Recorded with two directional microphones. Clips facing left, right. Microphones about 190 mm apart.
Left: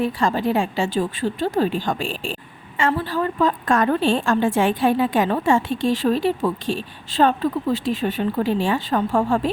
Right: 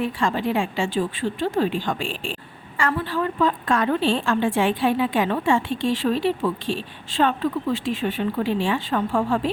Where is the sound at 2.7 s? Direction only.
25° left (ahead or behind).